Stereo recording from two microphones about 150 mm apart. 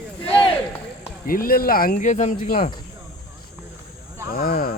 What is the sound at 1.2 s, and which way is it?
Speech, 75° left (ahead or behind).